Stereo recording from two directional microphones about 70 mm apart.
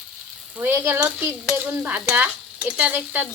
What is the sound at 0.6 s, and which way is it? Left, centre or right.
Speech, right.